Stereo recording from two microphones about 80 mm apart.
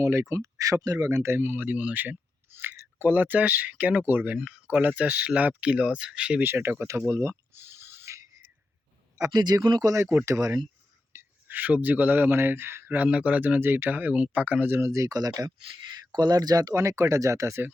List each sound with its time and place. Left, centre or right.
0.0 s speech: right; by 6.4 s centre
6.4 s a sound: right
9.3 s speech: right
9.9 s speech: right
11.1 s speech: right